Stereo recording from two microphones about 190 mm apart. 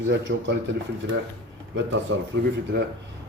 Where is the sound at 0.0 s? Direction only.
75° right (ahead or behind).